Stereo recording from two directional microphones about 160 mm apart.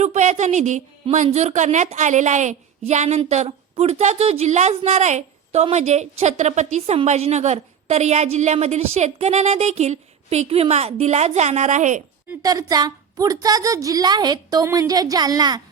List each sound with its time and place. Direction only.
0.0 s a woman's voice: 45° right (ahead or behind)
12.4 s a woman's voice: 20° right (ahead or behind)